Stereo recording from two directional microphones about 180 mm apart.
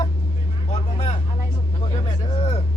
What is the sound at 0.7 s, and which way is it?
Speech, 35° left (ahead or behind).